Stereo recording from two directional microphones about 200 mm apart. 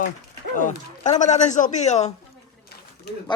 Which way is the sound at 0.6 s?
40° left (ahead or behind).